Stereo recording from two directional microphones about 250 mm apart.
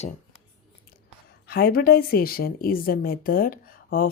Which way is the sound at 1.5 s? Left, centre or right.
Left.